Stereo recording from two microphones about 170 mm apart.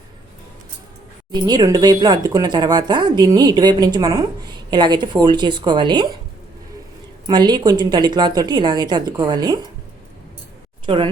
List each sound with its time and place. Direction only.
1.3 s speech: 25° right (ahead or behind)
7.3 s speech: 25° right (ahead or behind)
10.8 s speech: 30° right (ahead or behind)